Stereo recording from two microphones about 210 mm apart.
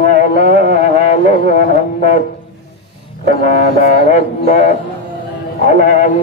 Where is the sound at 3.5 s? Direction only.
35° left (ahead or behind).